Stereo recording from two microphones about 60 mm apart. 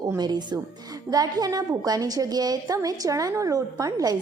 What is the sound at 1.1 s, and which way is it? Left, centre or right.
A woman's voice, right.